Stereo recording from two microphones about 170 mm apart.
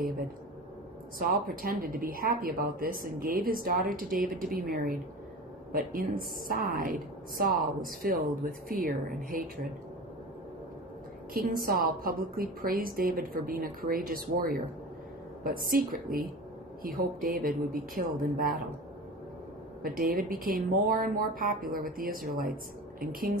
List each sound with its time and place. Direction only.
1.2 s a woman's voice: 60° right (ahead or behind)
11.3 s a woman's voice: 55° right (ahead or behind)
19.8 s a woman's voice: 60° right (ahead or behind)